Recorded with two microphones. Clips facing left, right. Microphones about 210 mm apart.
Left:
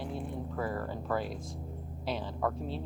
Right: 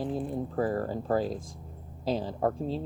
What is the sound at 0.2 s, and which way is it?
Speech, 35° right (ahead or behind).